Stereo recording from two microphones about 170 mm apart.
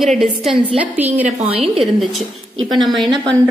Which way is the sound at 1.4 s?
35° right (ahead or behind).